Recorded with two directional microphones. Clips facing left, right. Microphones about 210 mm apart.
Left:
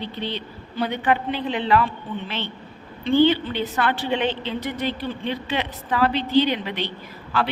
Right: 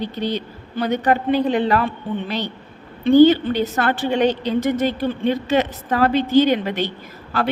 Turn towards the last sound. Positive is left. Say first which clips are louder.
# right 1 dB
turn(degrees=-45)  # may be behind; listen again after turning